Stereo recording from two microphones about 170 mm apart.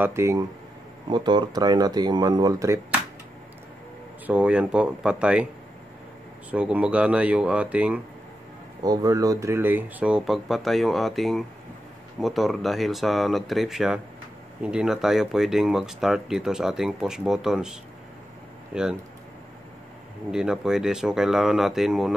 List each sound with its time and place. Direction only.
0.0 s speech: 15° right (ahead or behind)
4.3 s speech: 5° right (ahead or behind)
6.5 s speech: 5° right (ahead or behind)
8.8 s speech: 20° right (ahead or behind); by 18.9 s 5° right (ahead or behind)
20.2 s speech: 5° right (ahead or behind)